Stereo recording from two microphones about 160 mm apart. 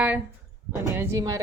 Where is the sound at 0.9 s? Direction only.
20° right (ahead or behind).